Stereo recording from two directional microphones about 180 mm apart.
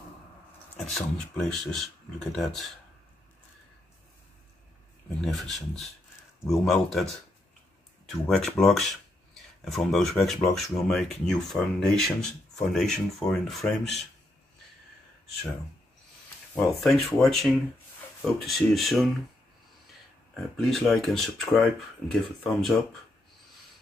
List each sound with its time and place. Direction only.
0.7 s speech: 5° left (ahead or behind)
5.2 s speech: centre (ahead or behind)
8.3 s speech: centre (ahead or behind)
16.5 s speech: centre (ahead or behind)
20.3 s speech: centre (ahead or behind)